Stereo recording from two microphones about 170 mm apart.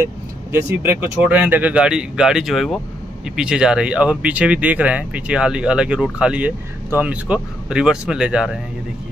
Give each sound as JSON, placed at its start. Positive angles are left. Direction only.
{"t": 0.0, "sound": "speech", "side_deg": -15}